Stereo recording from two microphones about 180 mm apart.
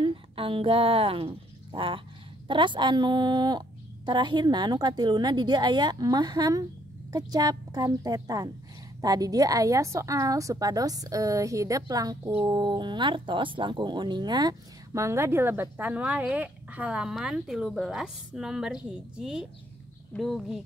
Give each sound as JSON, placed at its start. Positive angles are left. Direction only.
{"t": 0.0, "sound": "a woman's voice", "side_deg": -30}